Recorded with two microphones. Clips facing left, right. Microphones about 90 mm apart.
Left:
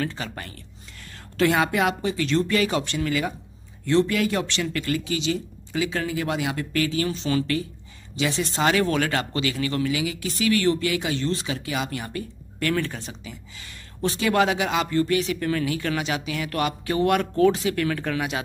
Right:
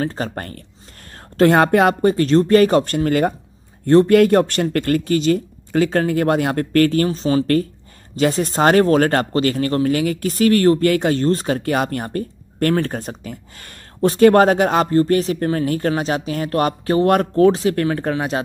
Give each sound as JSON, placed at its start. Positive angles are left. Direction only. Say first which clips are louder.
{"t": 0.0, "sound": "speech", "louder": "right 6 dB", "side_deg": -40}